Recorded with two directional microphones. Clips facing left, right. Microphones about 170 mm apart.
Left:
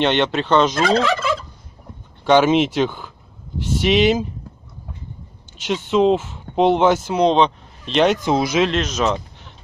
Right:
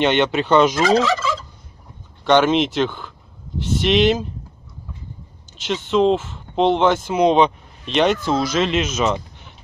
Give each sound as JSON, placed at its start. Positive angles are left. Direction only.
{"t": 0.0, "sound": "fowl", "side_deg": -5}
{"t": 0.8, "sound": "fowl", "side_deg": 60}
{"t": 2.2, "sound": "speech", "side_deg": 5}
{"t": 5.6, "sound": "speech", "side_deg": 10}
{"t": 7.1, "sound": "fowl", "side_deg": -5}
{"t": 8.2, "sound": "speech", "side_deg": 15}
{"t": 8.6, "sound": "speech", "side_deg": -5}